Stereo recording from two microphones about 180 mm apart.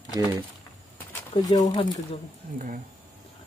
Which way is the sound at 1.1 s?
20° left (ahead or behind).